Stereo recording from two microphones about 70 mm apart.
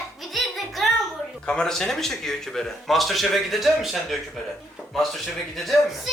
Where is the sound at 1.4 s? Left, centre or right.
Centre.